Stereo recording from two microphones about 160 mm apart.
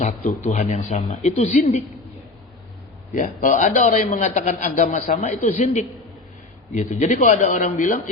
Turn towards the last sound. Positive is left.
turn(degrees=55)  # may be behind; listen again after turning